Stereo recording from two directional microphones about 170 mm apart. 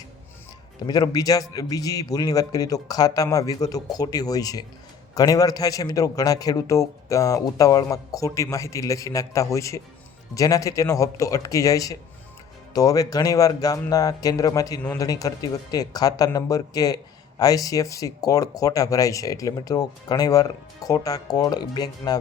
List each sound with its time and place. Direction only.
0.9 s speech: 20° left (ahead or behind)